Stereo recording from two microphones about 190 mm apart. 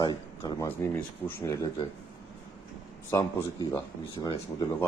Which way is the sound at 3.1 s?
15° left (ahead or behind).